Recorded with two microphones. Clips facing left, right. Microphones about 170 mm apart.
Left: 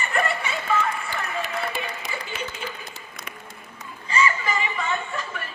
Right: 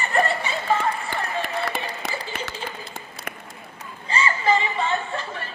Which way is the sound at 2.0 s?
55° right (ahead or behind).